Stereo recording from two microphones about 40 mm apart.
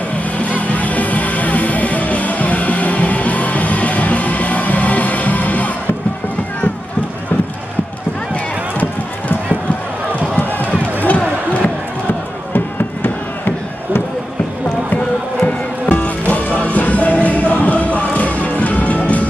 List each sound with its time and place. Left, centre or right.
0.4 s music: left
10.4 s run: left
12.5 s chop: left
15.4 s music: left